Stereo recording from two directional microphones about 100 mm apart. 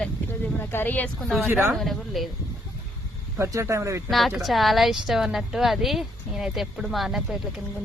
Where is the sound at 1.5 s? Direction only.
25° right (ahead or behind).